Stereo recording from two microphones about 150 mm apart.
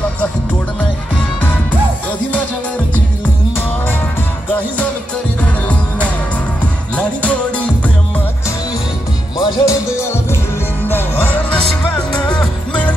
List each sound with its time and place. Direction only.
1.1 s music: 10° left (ahead or behind)
5.4 s music: 10° left (ahead or behind)
9.4 s music: 20° left (ahead or behind)